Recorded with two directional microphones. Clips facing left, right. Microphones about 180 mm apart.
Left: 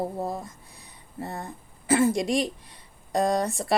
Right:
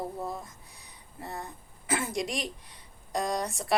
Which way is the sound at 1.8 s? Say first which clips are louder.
Left 9 dB; 30° left (ahead or behind).